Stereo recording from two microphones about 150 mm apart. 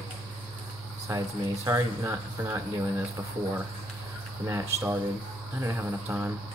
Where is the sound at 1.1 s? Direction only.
20° right (ahead or behind).